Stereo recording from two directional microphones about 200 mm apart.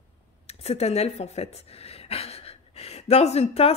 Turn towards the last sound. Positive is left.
turn(degrees=30)  # may be behind; listen again after turning